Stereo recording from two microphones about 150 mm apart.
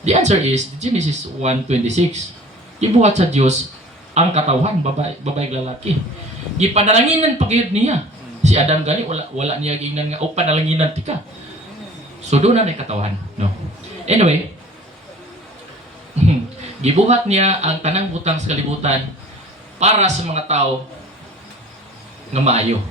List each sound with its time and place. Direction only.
0.0 s speech: 50° right (ahead or behind)
12.3 s a man's voice: 45° right (ahead or behind)
16.8 s speech: 45° right (ahead or behind)
22.3 s speech: 45° right (ahead or behind)